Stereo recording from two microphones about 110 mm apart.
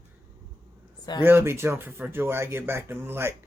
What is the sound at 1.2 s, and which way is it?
Speech, 20° right (ahead or behind).